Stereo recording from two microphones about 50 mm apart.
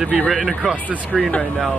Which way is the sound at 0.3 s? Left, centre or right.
Centre.